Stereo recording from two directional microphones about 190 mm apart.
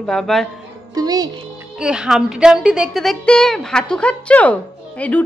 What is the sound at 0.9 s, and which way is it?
Speech, 20° right (ahead or behind).